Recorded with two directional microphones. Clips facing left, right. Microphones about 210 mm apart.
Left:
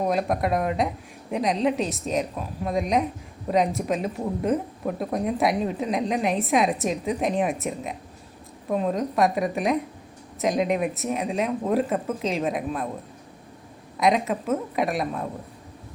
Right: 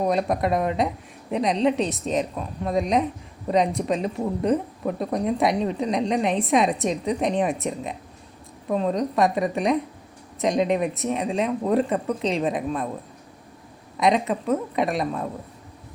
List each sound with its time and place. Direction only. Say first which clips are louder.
0.0 s speech: right 1 dB; centre (ahead or behind)
14.0 s speech: right 1 dB; centre (ahead or behind)